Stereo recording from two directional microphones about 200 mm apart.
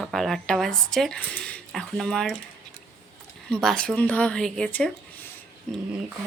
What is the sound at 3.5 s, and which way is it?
A woman's voice, 5° left (ahead or behind).